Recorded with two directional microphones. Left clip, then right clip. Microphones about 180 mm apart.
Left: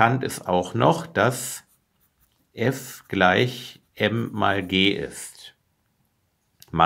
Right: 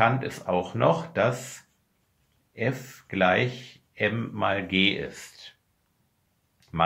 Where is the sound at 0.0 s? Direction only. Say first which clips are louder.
Left 3 dB; 35° left (ahead or behind).